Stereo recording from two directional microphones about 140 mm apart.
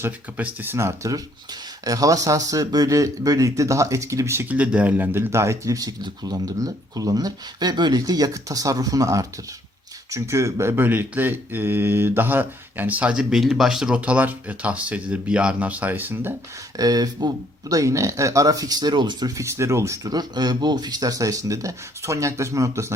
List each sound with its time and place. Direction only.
0.0 s speech: 15° right (ahead or behind)
16.7 s speech: 25° right (ahead or behind)